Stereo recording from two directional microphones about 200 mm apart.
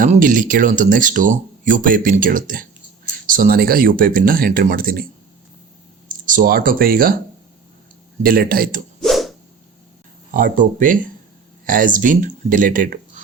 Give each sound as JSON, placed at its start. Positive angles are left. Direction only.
{"t": 0.0, "sound": "speech", "side_deg": -40}
{"t": 6.2, "sound": "speech", "side_deg": -45}
{"t": 8.2, "sound": "speech", "side_deg": -45}
{"t": 9.0, "sound": "a sound", "side_deg": 0}
{"t": 10.3, "sound": "speech", "side_deg": -40}